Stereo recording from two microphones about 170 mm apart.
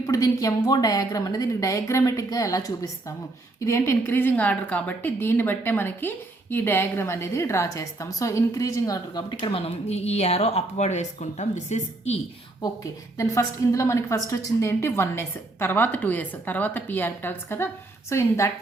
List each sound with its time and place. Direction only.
0.0 s a woman's voice: 20° left (ahead or behind); by 12.2 s 40° left (ahead or behind)
13.1 s a woman's voice: 20° left (ahead or behind)